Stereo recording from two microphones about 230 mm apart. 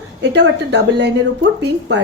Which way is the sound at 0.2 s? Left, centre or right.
Right.